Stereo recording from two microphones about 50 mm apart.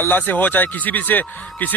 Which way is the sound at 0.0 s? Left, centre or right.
Left.